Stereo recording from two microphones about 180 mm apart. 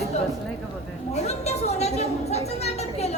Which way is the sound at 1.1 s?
35° left (ahead or behind).